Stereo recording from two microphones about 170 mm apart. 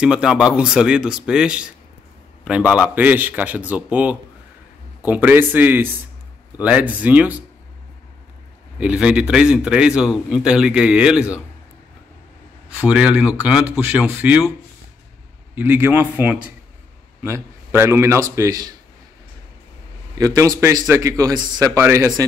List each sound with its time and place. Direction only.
0.0 s a man's voice: 5° right (ahead or behind)
8.7 s a man's voice: 5° right (ahead or behind)
12.6 s speech: 5° right (ahead or behind)
15.5 s speech: 10° right (ahead or behind)
20.2 s a man's voice: 20° right (ahead or behind)